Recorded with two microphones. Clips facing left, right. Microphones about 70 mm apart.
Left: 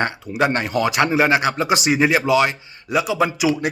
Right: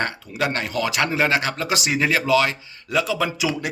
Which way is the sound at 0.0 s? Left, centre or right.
Left.